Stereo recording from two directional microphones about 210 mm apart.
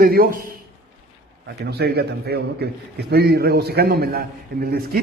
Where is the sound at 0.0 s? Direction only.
45° right (ahead or behind).